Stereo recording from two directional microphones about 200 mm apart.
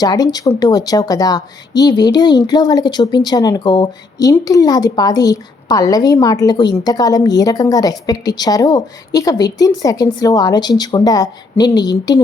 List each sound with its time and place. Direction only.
0.0 s speech: 20° left (ahead or behind)